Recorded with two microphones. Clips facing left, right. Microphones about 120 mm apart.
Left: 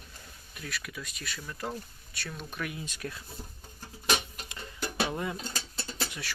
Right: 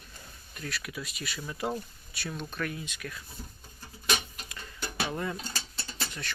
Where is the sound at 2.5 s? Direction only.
10° left (ahead or behind).